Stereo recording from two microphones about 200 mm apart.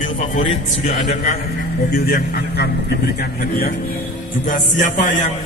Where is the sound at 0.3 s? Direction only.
30° left (ahead or behind).